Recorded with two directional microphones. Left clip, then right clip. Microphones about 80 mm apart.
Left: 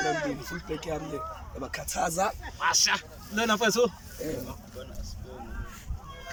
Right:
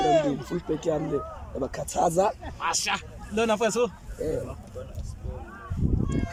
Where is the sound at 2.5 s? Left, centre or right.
Right.